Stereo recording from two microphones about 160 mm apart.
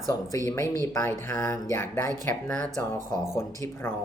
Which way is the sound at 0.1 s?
20° left (ahead or behind).